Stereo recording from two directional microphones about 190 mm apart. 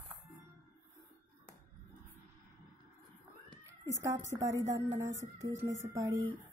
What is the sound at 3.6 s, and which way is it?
Speech, 15° right (ahead or behind).